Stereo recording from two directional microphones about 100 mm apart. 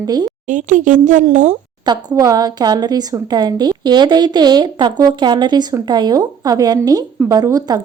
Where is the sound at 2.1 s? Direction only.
40° right (ahead or behind).